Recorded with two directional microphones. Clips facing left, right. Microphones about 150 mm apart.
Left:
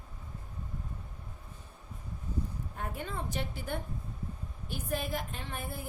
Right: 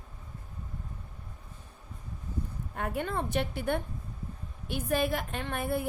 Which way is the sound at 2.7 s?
70° right (ahead or behind).